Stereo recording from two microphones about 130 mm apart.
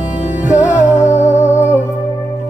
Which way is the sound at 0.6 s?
20° left (ahead or behind).